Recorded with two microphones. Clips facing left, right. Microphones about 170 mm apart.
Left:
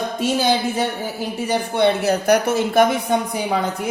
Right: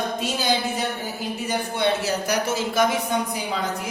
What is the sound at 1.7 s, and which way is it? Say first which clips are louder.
A man's voice: left 6 dB; 60° left (ahead or behind).